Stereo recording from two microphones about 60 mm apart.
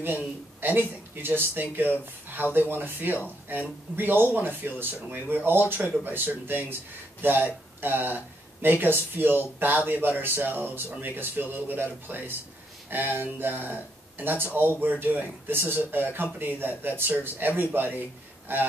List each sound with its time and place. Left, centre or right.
0.0 s speech: right